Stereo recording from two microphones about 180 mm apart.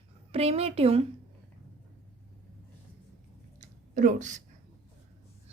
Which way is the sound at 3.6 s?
45° right (ahead or behind).